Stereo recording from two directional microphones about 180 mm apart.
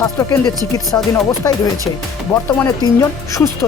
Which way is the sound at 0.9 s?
20° left (ahead or behind).